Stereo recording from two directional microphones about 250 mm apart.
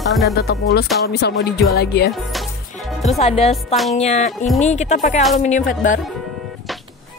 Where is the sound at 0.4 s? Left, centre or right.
Left.